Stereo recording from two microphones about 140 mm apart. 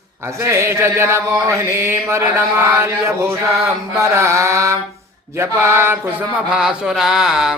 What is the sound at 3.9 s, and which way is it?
Speech, 20° right (ahead or behind).